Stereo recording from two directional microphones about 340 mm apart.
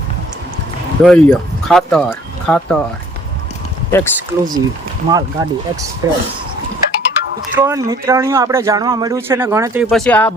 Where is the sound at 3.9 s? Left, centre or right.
Centre.